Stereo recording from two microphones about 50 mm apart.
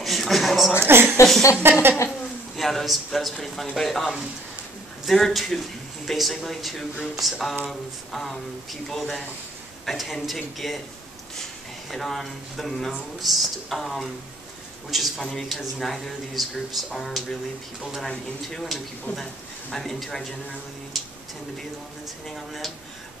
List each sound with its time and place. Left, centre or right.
0.0 s a sound: centre
0.8 s a woman's voice: right
2.0 s a woman's voice: centre
11.9 s speech: centre
13.2 s speech: centre
19.1 s speech: left
19.7 s speech: centre
20.9 s a sound: centre
22.3 s speech: centre